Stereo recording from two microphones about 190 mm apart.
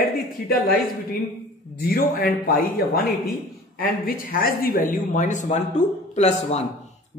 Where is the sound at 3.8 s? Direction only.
50° left (ahead or behind).